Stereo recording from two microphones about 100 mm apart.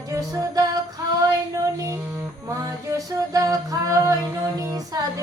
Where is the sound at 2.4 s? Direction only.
35° right (ahead or behind).